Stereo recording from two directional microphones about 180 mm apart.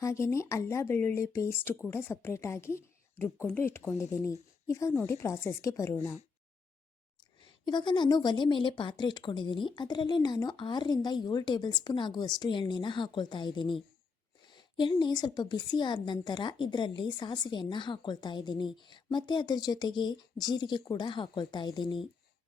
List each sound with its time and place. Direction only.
0.0 s a woman's voice: 15° left (ahead or behind)
7.4 s a woman's voice: 25° left (ahead or behind)